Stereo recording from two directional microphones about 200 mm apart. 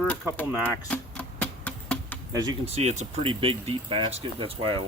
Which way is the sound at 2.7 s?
30° right (ahead or behind).